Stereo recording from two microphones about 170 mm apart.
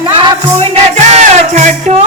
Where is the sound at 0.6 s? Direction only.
40° right (ahead or behind).